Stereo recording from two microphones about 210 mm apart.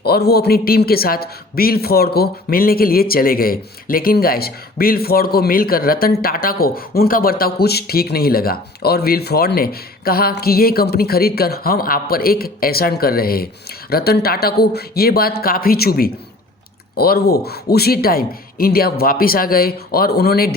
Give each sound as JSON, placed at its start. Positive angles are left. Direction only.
{"t": 0.0, "sound": "a man's voice", "side_deg": 50}